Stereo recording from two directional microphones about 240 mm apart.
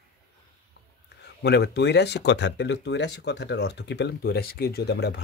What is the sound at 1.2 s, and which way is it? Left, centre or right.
Speech, left.